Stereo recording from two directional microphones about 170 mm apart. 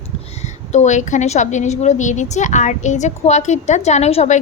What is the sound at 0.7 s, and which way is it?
A woman's voice, 45° left (ahead or behind).